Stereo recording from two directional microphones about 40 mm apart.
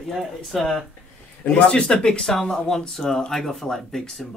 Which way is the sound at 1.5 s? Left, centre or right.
Left.